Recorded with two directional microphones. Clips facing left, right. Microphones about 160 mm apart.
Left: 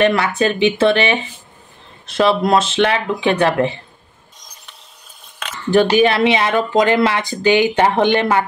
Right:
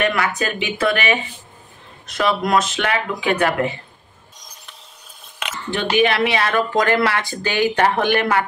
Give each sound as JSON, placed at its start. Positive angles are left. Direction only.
{"t": 0.0, "sound": "speech", "side_deg": 30}
{"t": 5.7, "sound": "speech", "side_deg": 35}